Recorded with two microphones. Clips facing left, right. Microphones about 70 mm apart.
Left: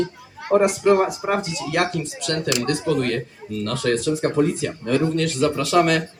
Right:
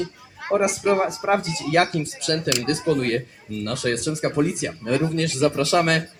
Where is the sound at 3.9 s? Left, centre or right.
Centre.